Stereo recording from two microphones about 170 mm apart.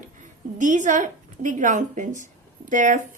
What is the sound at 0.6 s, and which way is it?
A woman's voice, 50° right (ahead or behind).